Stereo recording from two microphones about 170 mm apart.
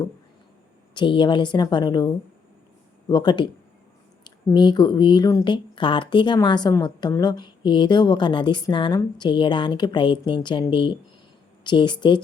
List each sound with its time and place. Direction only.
0.9 s speech: 30° left (ahead or behind)
3.1 s speech: 25° left (ahead or behind)